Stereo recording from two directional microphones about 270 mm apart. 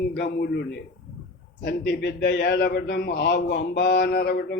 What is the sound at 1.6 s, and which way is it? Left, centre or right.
A man's voice, left.